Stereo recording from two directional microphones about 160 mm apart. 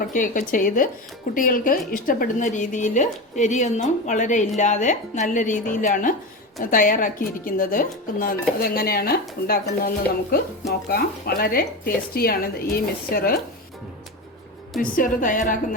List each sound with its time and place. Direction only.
0.0 s a woman's voice: 55° left (ahead or behind); by 9.9 s 70° left (ahead or behind)
10.9 s speech: 70° left (ahead or behind)
14.8 s speech: 60° left (ahead or behind)